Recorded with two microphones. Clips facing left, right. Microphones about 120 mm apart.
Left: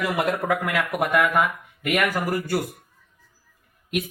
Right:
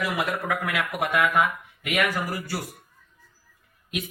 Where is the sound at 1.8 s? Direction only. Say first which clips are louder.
Left 3 dB; 50° left (ahead or behind).